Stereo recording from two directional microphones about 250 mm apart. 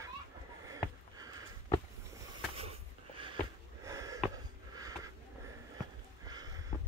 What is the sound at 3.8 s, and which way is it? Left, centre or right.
Sniff, centre.